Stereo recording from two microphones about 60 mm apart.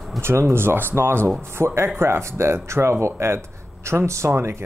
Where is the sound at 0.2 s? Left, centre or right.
Right.